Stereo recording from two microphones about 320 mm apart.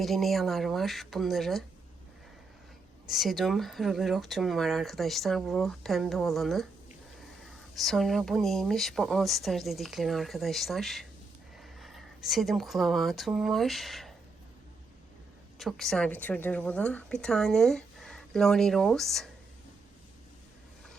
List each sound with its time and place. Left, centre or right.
0.0 s a woman's voice: centre
3.1 s a woman's voice: centre
7.8 s a woman's voice: centre
15.5 s a woman's voice: centre